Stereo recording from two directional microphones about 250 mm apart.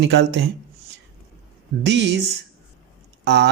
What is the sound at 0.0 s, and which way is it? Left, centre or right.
Speech, right.